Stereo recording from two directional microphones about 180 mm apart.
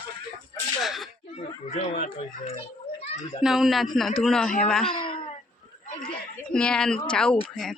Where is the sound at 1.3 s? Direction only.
40° left (ahead or behind).